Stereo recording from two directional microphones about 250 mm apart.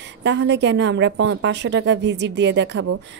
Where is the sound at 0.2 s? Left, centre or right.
Right.